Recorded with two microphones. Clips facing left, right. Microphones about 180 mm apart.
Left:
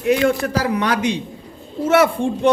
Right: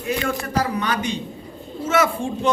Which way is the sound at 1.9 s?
60° left (ahead or behind).